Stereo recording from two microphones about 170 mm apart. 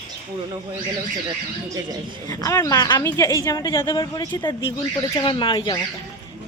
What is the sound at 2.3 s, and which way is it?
Speech, 20° left (ahead or behind).